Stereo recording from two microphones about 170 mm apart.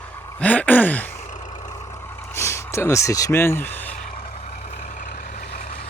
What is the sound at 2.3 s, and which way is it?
Speech, 15° left (ahead or behind).